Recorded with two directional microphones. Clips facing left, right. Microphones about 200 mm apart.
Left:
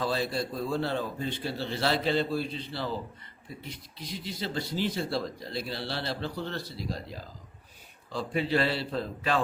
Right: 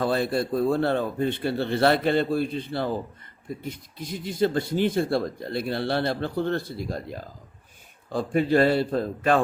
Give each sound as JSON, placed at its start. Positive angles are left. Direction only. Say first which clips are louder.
{"t": 0.0, "sound": "speech", "louder": "right 6 dB", "side_deg": -55}